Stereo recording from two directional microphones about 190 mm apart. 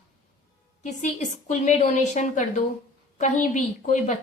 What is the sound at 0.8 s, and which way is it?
A woman's voice, 40° left (ahead or behind).